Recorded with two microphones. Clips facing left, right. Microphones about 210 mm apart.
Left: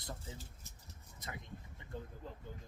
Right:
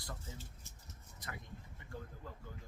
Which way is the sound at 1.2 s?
20° left (ahead or behind).